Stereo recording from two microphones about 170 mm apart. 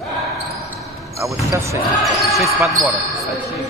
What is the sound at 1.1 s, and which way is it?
Speech, 20° right (ahead or behind).